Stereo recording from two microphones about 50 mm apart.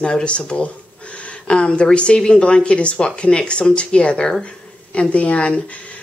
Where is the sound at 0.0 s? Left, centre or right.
Left.